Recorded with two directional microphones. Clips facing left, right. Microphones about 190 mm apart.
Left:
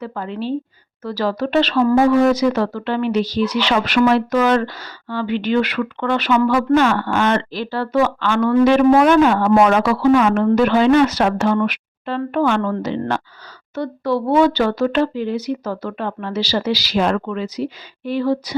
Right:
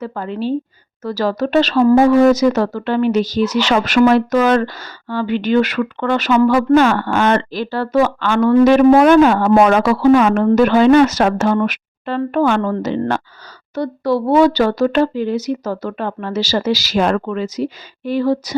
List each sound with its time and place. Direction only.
0.0 s speech: 45° right (ahead or behind)